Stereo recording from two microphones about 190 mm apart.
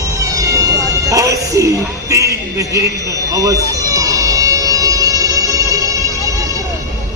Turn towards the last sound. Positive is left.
turn(degrees=-15)  # may be behind; listen again after turning